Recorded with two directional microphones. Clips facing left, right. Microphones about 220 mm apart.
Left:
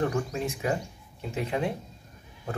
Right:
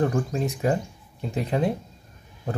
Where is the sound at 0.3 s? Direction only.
40° right (ahead or behind).